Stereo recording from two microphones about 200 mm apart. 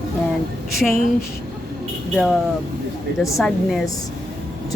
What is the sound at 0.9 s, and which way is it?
Speech, 45° left (ahead or behind).